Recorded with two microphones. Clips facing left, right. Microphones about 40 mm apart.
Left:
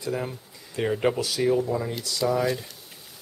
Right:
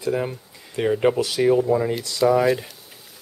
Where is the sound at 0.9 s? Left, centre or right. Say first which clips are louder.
Right 5 dB; centre.